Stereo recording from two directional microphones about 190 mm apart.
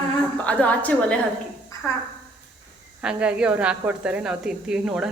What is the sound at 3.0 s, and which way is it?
A woman's voice, 5° right (ahead or behind).